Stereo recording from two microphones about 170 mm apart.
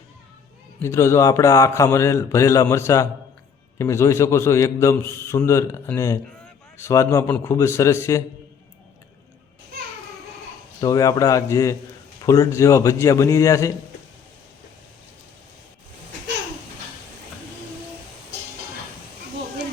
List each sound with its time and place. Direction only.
0.8 s a man's voice: 15° left (ahead or behind)
10.8 s a man's voice: 20° left (ahead or behind)